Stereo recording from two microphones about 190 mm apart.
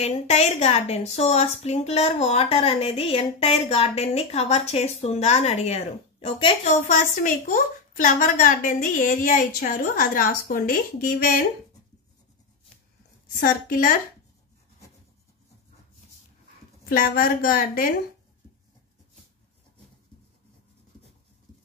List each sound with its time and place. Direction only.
0.0 s a woman's voice: 35° left (ahead or behind)
6.7 s a woman's voice: 40° left (ahead or behind)
13.4 s a woman's voice: 50° left (ahead or behind)
16.9 s a woman's voice: 50° left (ahead or behind)